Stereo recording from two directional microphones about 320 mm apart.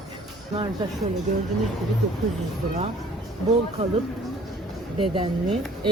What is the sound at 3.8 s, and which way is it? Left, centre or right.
Speech, centre.